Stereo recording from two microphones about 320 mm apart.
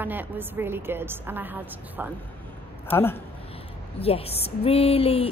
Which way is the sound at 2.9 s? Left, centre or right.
Centre.